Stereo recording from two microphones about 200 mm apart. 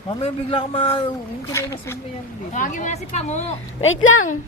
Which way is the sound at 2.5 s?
40° left (ahead or behind).